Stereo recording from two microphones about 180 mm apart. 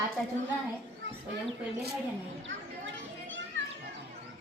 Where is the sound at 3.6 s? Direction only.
90° right.